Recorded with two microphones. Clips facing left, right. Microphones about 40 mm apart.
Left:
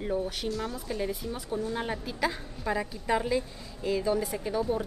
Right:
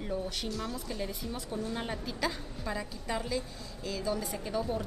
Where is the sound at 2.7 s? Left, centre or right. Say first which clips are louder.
Left 7 dB; left.